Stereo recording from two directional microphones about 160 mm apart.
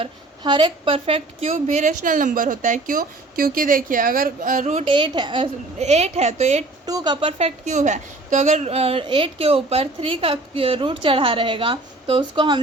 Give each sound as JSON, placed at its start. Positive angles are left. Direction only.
{"t": 0.0, "sound": "a woman's voice", "side_deg": -30}
{"t": 4.9, "sound": "a woman's voice", "side_deg": -30}
{"t": 5.8, "sound": "a woman's voice", "side_deg": -45}
{"t": 6.8, "sound": "a woman's voice", "side_deg": -25}